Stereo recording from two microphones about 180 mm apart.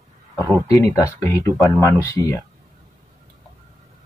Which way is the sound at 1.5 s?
Centre (ahead or behind).